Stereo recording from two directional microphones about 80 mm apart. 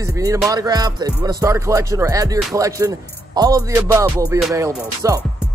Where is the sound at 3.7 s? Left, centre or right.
Right.